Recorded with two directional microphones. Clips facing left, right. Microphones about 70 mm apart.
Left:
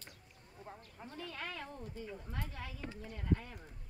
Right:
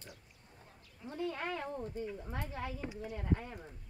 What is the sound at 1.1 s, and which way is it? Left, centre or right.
Speech, right.